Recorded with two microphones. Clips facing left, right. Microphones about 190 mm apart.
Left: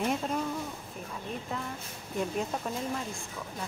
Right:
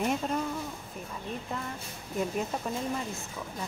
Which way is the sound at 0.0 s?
Centre (ahead or behind).